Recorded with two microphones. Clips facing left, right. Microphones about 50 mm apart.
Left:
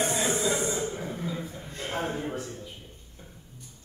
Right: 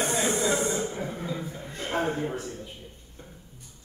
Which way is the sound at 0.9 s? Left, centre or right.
Centre.